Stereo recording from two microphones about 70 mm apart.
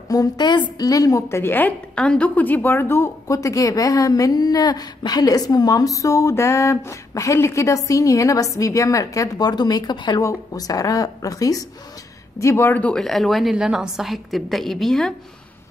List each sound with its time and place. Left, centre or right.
0.1 s a woman's voice: left
1.3 s a woman's voice: left
2.0 s a woman's voice: centre; by 3.1 s left
3.3 s a woman's voice: left
9.5 s speech: left
10.2 s a woman's voice: left
12.4 s a woman's voice: left
12.9 s a woman's voice: centre